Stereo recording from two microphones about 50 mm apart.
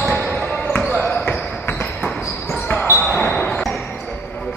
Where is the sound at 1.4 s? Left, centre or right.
Left.